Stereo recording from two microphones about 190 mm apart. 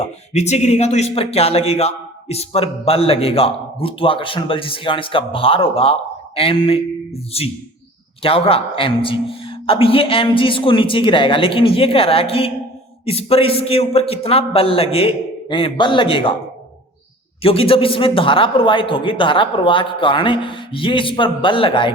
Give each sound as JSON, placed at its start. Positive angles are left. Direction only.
{"t": 0.3, "sound": "a man's voice", "side_deg": 35}
{"t": 17.4, "sound": "a man's voice", "side_deg": 30}